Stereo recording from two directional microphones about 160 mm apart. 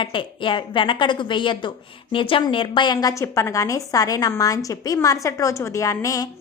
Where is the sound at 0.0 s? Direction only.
30° left (ahead or behind).